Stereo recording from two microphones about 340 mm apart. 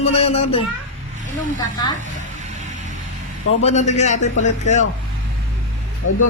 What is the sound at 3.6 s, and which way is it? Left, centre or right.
A man's voice, centre.